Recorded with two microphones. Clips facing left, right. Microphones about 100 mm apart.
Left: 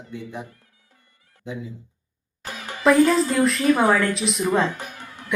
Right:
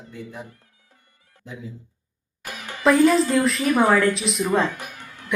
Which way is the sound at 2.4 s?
20° left (ahead or behind).